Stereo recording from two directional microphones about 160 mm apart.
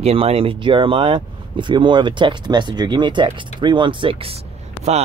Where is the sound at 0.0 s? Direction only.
40° right (ahead or behind).